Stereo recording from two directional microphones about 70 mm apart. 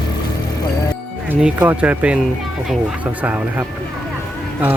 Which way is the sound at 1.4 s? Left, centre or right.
Right.